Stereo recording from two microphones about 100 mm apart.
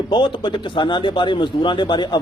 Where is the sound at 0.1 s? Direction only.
50° left (ahead or behind).